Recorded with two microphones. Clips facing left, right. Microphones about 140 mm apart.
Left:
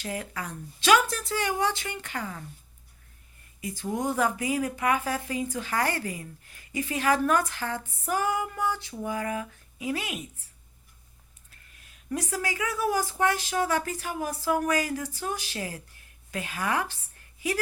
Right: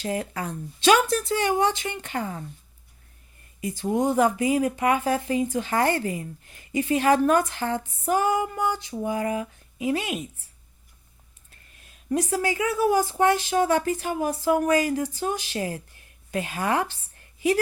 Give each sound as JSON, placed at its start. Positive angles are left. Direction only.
{"t": 0.0, "sound": "speech", "side_deg": -30}
{"t": 3.6, "sound": "speech", "side_deg": -25}
{"t": 11.8, "sound": "speech", "side_deg": -30}